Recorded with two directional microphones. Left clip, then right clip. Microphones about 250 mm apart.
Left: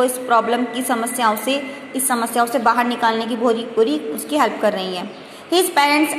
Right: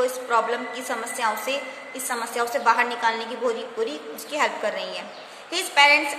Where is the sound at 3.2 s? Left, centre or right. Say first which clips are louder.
Left 7 dB; centre.